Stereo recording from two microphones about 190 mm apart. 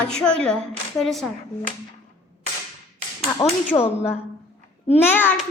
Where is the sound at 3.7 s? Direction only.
25° left (ahead or behind).